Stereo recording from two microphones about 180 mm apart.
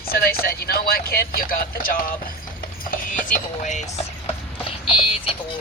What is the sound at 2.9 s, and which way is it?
Music, 45° left (ahead or behind).